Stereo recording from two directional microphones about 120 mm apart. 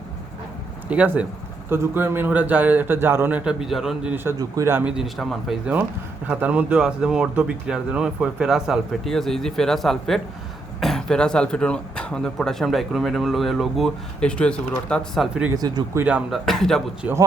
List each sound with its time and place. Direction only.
0.9 s a man's voice: 10° right (ahead or behind)
4.1 s a man's voice: 20° right (ahead or behind)
4.4 s speech: 30° right (ahead or behind)
4.7 s speech: 10° right (ahead or behind)
6.2 s speech: 10° right (ahead or behind); by 15.3 s 5° left (ahead or behind)
15.5 s speech: 35° right (ahead or behind)
16.0 s a man's voice: 10° right (ahead or behind)
16.3 s speech: centre (ahead or behind)